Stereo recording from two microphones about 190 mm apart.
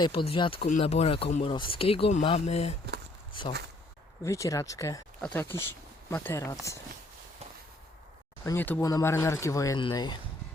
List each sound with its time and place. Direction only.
0.0 s speech: 25° left (ahead or behind)
8.4 s speech: 10° left (ahead or behind)